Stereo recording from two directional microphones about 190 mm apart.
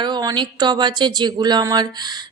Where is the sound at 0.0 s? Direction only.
20° right (ahead or behind).